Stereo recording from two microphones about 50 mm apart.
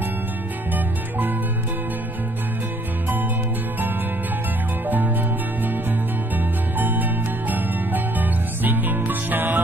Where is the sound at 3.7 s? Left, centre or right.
Right.